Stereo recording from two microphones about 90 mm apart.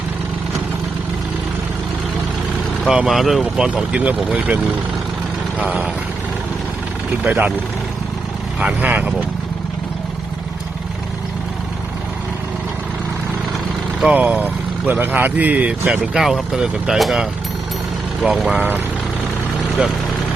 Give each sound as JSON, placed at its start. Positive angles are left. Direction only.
{"t": 2.8, "sound": "speech", "side_deg": -5}
{"t": 7.3, "sound": "speech", "side_deg": -15}
{"t": 8.6, "sound": "speech", "side_deg": -15}
{"t": 14.0, "sound": "speech", "side_deg": -15}
{"t": 18.5, "sound": "speech", "side_deg": -20}